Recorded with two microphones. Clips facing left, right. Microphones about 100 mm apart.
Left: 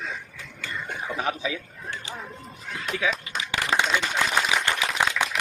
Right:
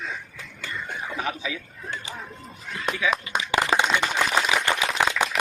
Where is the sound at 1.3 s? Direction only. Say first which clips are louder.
Left 2 dB; 35° left (ahead or behind).